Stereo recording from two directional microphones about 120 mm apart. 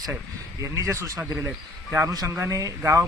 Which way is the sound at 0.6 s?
25° right (ahead or behind).